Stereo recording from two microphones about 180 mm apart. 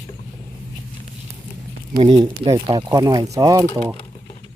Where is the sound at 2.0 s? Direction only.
30° right (ahead or behind).